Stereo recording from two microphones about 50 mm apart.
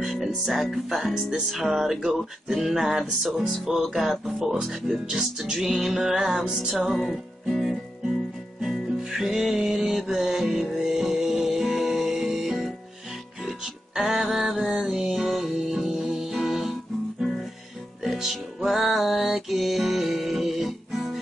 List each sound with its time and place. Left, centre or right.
0.0 s speech: centre
1.5 s music: centre
7.0 s music: centre